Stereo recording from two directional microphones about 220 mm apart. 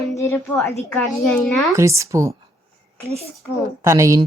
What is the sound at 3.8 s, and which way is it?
Speech, 15° right (ahead or behind).